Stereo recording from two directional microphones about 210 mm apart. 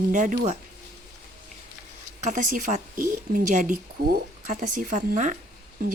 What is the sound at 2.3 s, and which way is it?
Speech, 35° right (ahead or behind).